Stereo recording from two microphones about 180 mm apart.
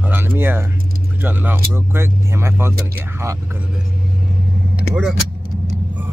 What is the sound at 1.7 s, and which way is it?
Speech, 15° right (ahead or behind).